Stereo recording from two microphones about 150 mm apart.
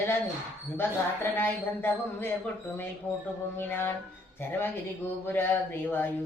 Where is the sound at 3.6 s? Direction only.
15° left (ahead or behind).